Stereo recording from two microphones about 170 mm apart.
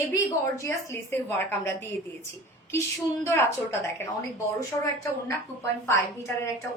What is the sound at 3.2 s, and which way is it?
Speech, 15° left (ahead or behind).